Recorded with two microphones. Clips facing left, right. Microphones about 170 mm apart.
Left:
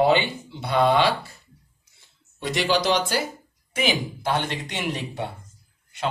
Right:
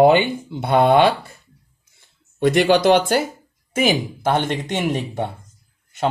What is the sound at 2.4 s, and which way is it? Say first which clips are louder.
A woman's voice: right 8 dB; 55° right (ahead or behind).